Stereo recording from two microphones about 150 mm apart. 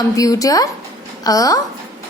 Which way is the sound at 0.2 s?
25° left (ahead or behind).